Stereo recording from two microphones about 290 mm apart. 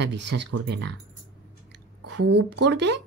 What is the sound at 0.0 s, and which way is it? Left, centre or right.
Speech, right.